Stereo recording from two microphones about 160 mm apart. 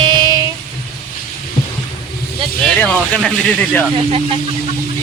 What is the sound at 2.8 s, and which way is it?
Speech, 5° left (ahead or behind).